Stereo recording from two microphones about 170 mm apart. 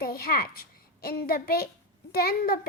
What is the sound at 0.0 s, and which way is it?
A child's voice, 60° left (ahead or behind).